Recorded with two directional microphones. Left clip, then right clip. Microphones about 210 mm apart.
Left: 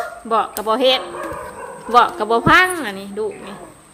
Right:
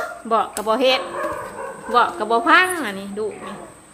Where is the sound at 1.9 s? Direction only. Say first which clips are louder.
Left 3 dB; 25° left (ahead or behind).